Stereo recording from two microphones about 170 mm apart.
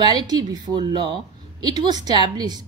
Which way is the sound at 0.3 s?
25° right (ahead or behind).